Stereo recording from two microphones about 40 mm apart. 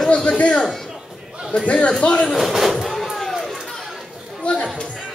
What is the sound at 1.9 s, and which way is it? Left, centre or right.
Speech, left.